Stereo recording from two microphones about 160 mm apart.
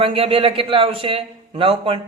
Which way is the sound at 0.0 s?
35° right (ahead or behind).